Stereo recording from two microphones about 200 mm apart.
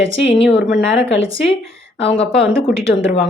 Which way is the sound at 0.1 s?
30° left (ahead or behind).